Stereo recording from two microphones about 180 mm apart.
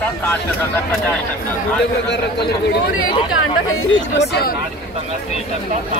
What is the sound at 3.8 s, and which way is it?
Speech, 80° left.